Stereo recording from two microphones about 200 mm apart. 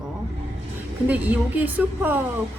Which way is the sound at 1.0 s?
10° right (ahead or behind).